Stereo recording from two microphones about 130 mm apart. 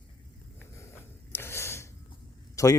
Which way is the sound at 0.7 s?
20° left (ahead or behind).